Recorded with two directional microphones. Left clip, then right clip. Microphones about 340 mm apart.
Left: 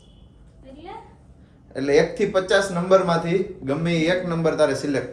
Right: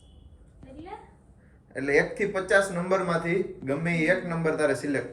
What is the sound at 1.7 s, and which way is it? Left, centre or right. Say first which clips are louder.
Speech: left 5 dB; centre.